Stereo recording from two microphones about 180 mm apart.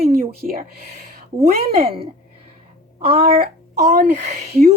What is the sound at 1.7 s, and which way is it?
A woman's voice, 35° right (ahead or behind).